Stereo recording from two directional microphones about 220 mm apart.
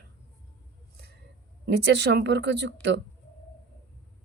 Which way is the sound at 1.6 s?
50° right (ahead or behind).